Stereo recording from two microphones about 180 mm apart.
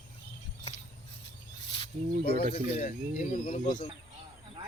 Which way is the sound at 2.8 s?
50° left (ahead or behind).